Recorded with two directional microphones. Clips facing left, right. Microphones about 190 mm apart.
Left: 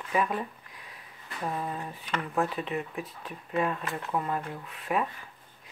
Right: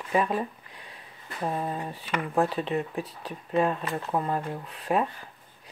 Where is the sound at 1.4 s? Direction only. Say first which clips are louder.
Right 3 dB; 30° right (ahead or behind).